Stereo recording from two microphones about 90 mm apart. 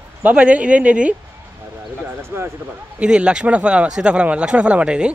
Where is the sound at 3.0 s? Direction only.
10° right (ahead or behind).